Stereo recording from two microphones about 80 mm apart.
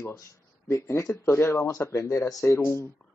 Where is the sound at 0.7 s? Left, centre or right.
Left.